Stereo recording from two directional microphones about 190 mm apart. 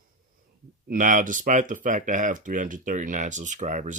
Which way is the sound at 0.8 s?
45° right (ahead or behind).